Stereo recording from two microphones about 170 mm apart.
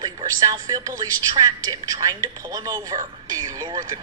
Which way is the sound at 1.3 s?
25° right (ahead or behind).